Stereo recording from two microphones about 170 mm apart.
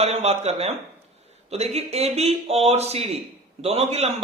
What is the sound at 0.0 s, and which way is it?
Speech, 35° right (ahead or behind).